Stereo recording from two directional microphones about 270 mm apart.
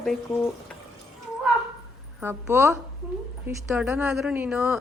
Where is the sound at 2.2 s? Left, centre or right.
Centre.